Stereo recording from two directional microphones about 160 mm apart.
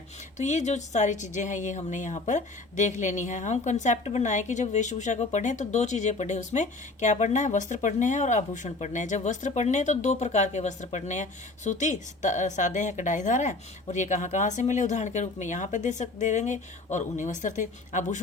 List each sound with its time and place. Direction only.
0.3 s speech: 45° left (ahead or behind)